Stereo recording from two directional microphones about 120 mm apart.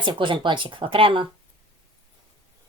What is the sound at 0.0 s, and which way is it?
A woman's voice, 45° right (ahead or behind).